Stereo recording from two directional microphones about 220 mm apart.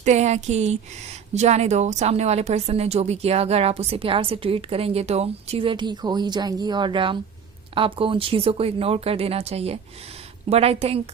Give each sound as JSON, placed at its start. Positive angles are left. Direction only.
{"t": 0.0, "sound": "a woman's voice", "side_deg": -30}